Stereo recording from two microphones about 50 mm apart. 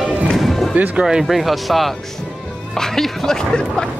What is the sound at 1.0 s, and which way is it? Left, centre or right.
Speech, centre.